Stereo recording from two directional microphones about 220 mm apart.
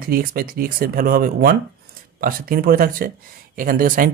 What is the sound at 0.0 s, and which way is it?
Speech, 40° right (ahead or behind).